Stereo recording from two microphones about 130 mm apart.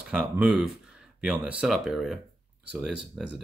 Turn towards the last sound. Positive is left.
turn(degrees=0)  # may be behind; listen again after turning